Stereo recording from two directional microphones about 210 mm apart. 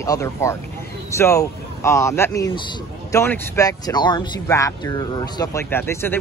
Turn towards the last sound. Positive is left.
turn(degrees=10)  # may be behind; listen again after turning